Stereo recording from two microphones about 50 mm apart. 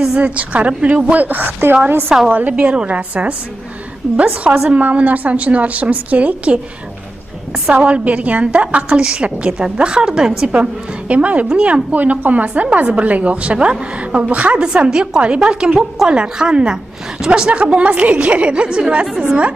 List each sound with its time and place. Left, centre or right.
0.2 s a woman's voice: right
2.0 s a woman's voice: centre
2.3 s a woman's voice: right
7.7 s a woman's voice: right